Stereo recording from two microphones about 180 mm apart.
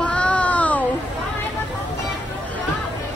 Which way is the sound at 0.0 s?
5° left (ahead or behind).